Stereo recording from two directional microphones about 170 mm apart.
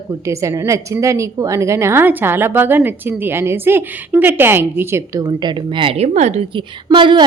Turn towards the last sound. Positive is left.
turn(degrees=-30)  # may be behind; listen again after turning